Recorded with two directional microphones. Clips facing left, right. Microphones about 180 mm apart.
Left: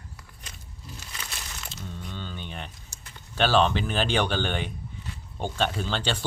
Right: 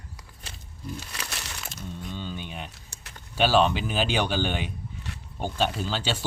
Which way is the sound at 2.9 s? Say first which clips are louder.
Right 1 dB; 65° right (ahead or behind).